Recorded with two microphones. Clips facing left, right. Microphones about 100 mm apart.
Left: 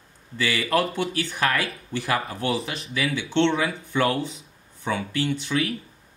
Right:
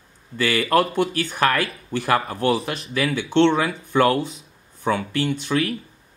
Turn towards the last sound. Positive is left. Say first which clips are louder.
# right 3 dB
turn(degrees=-55)  # may be behind; listen again after turning